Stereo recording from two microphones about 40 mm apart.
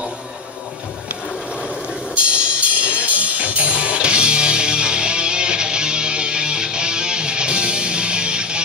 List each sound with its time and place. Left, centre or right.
2.1 s music: right